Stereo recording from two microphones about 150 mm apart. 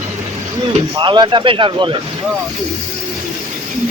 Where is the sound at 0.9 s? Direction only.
30° right (ahead or behind).